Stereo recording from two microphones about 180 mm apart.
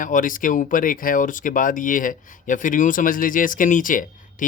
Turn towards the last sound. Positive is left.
turn(degrees=50)  # may be behind; listen again after turning